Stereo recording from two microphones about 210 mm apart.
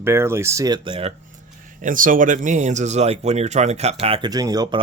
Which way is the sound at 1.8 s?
40° right (ahead or behind).